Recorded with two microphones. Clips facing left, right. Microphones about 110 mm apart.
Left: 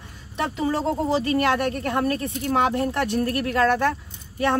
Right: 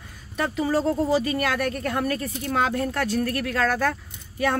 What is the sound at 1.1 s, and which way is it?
Speech, 25° left (ahead or behind).